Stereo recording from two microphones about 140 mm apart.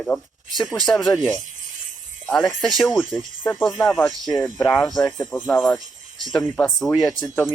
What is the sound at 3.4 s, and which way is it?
Speech, 15° left (ahead or behind).